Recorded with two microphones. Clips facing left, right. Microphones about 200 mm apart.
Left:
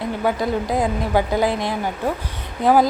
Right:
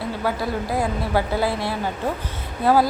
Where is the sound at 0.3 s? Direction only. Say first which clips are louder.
Left 4 dB; 20° left (ahead or behind).